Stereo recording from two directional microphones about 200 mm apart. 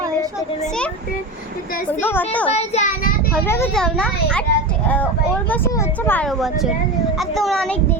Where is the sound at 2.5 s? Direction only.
35° left (ahead or behind).